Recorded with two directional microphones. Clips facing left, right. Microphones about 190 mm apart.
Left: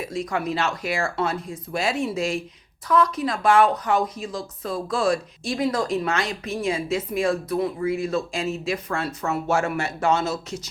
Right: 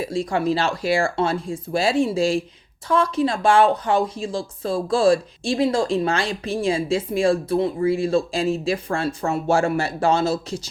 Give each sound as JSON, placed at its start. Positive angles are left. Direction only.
{"t": 0.0, "sound": "speech", "side_deg": -30}